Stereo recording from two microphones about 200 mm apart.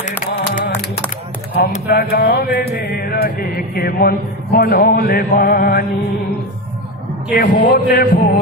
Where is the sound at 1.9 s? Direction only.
45° left (ahead or behind).